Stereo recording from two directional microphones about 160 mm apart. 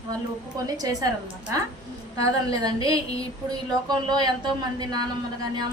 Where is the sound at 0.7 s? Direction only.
20° right (ahead or behind).